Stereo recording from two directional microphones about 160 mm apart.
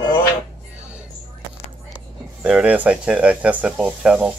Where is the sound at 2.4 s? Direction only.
5° right (ahead or behind).